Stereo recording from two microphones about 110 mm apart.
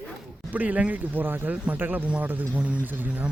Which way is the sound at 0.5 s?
15° right (ahead or behind).